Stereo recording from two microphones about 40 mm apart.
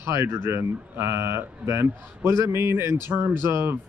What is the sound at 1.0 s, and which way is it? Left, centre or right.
A man's voice, right.